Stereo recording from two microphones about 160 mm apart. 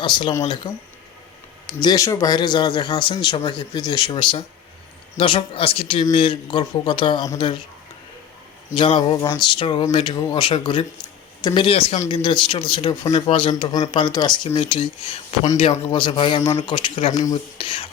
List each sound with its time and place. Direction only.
0.0 s speech: 30° left (ahead or behind)
8.7 s speech: 30° left (ahead or behind)
11.9 s speech: 30° left (ahead or behind)
13.1 s speech: 45° left (ahead or behind)
13.3 s speech: 30° left (ahead or behind)
15.9 s speech: 30° left (ahead or behind)